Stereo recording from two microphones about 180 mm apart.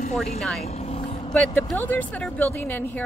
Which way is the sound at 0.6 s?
35° left (ahead or behind).